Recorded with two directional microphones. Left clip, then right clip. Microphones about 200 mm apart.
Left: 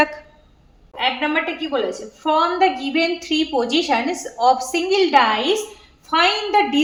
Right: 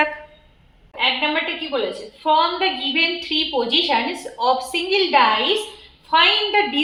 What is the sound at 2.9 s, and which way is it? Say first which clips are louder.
Speech: even; 50° left (ahead or behind).